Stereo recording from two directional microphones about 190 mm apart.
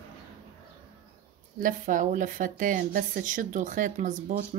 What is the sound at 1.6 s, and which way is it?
Speech, 45° right (ahead or behind).